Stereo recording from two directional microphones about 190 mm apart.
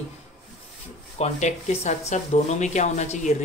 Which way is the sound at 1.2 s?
40° left (ahead or behind).